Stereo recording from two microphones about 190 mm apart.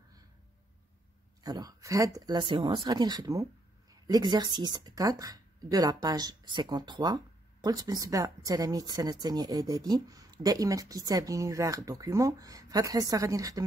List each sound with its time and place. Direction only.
1.4 s speech: 20° right (ahead or behind)